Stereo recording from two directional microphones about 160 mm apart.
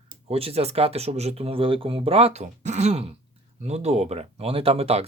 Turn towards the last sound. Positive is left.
turn(degrees=-40)  # may be behind; listen again after turning